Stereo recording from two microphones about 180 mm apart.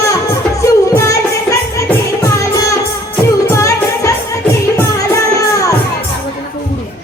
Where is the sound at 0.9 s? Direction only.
20° left (ahead or behind).